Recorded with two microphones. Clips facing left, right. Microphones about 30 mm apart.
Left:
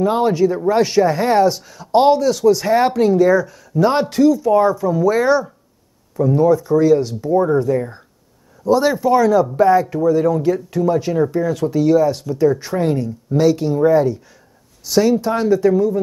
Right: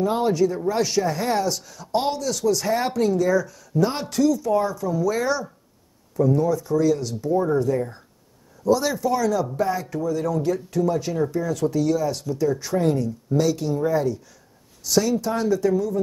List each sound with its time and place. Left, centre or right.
0.0 s speech: left